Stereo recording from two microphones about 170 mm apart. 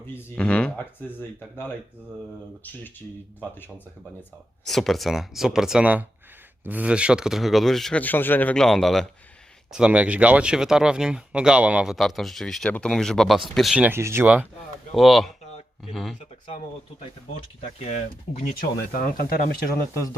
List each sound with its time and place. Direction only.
0.1 s speech: 15° left (ahead or behind)
4.6 s speech: centre (ahead or behind)
14.9 s speech: centre (ahead or behind)
17.8 s speech: 40° left (ahead or behind)
18.9 s speech: 60° left (ahead or behind)